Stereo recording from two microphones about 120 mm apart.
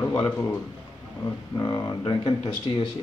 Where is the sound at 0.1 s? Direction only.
20° left (ahead or behind).